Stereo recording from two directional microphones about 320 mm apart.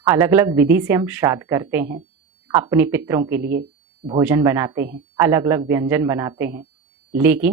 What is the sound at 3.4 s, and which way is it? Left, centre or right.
Speech, right.